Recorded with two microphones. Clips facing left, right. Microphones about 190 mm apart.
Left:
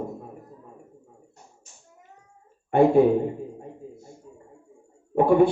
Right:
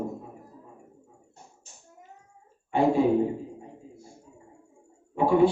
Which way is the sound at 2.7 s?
55° left (ahead or behind).